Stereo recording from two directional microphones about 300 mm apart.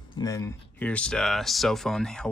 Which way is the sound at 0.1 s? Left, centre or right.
Centre.